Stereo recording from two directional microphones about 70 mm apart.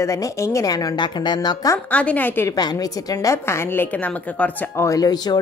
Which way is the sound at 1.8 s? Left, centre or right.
Left.